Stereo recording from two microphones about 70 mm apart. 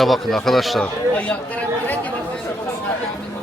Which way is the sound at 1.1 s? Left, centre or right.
Centre.